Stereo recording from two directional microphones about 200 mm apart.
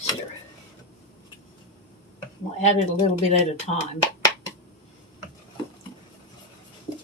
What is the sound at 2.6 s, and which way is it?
Speech, 35° left (ahead or behind).